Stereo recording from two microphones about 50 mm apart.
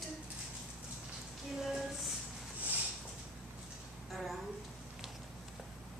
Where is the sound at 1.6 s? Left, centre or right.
Centre.